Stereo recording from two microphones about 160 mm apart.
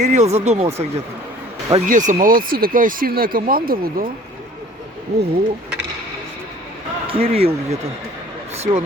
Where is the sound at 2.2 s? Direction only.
65° right (ahead or behind).